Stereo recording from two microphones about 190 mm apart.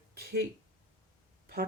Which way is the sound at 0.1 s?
55° right (ahead or behind).